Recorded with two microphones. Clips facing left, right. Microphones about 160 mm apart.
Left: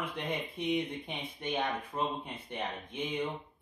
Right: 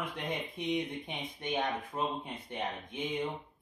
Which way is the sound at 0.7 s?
15° right (ahead or behind).